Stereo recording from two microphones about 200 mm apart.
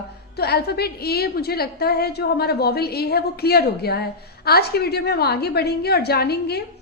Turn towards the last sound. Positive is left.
turn(degrees=55)  # may be behind; listen again after turning